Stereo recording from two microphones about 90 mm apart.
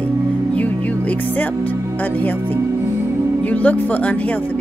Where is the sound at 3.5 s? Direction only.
15° left (ahead or behind).